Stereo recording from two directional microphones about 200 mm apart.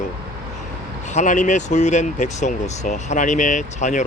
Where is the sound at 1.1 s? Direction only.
35° left (ahead or behind).